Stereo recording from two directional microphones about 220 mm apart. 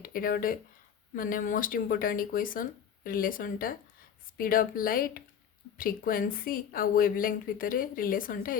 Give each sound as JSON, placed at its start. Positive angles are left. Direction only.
{"t": 0.0, "sound": "a woman's voice", "side_deg": 40}